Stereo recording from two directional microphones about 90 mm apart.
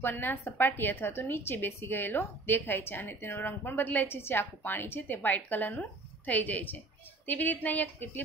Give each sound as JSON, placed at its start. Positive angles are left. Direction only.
{"t": 0.0, "sound": "a woman's voice", "side_deg": 20}